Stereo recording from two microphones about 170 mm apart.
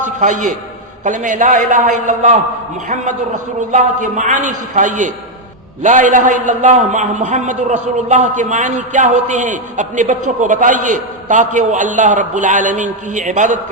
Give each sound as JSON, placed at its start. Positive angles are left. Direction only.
{"t": 0.0, "sound": "a man's voice", "side_deg": -45}